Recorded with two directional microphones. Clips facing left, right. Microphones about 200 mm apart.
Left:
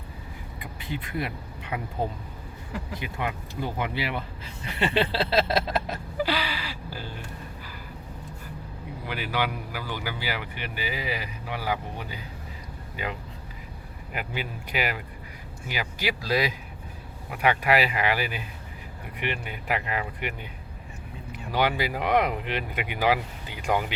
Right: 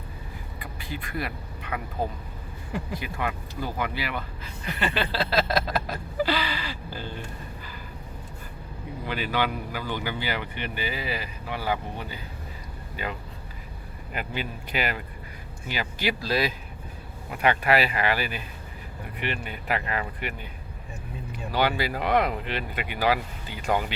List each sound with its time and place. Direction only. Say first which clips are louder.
0.6 s speech: left 2 dB; 20° left (ahead or behind)
2.0 s a sound: even; 25° left (ahead or behind); by 7.1 s 10° left (ahead or behind)
9.0 s speech: right 2 dB; 10° left (ahead or behind)
14.1 s speech: right 1 dB; 10° left (ahead or behind)
21.5 s speech: even; 15° left (ahead or behind)